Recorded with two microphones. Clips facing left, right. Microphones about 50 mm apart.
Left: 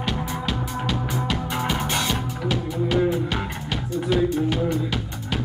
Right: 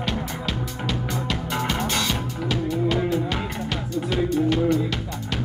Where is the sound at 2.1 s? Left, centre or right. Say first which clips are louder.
Left 1 dB; centre.